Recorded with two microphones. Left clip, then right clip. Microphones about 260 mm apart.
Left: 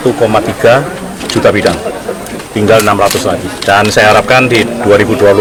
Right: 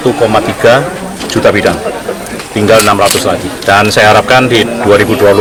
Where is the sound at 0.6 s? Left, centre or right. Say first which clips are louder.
Even; centre.